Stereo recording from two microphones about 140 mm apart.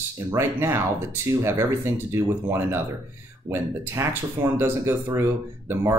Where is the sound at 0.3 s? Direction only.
20° right (ahead or behind).